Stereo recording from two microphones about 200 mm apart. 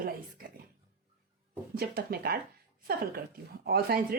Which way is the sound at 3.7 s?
50° right (ahead or behind).